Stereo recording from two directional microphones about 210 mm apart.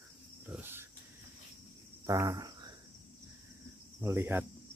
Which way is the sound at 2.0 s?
15° right (ahead or behind).